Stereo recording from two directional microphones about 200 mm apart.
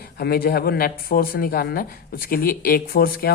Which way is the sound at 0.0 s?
50° left (ahead or behind).